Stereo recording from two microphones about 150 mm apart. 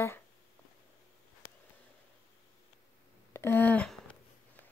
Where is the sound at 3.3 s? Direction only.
15° left (ahead or behind).